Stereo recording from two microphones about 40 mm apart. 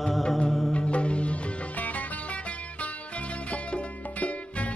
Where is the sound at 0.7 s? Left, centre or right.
Left.